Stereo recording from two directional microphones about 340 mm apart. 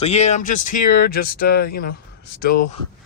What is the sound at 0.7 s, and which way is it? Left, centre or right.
Speech, left.